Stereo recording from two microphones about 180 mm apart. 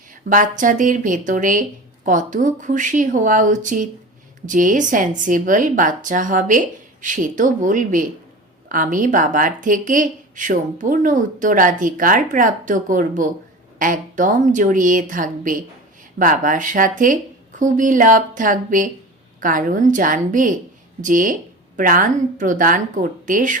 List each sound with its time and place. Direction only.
0.3 s a woman's voice: 45° right (ahead or behind)